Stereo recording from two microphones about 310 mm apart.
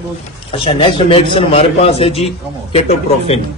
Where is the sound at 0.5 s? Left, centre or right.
Centre.